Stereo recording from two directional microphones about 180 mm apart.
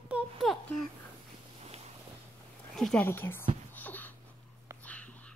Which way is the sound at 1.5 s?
35° right (ahead or behind).